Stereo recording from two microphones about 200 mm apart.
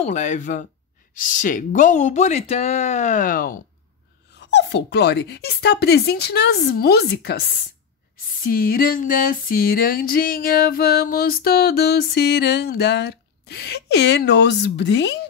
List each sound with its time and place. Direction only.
0.0 s speech: 35° left (ahead or behind)
4.4 s speech: 60° left (ahead or behind)
8.4 s music: 45° left (ahead or behind)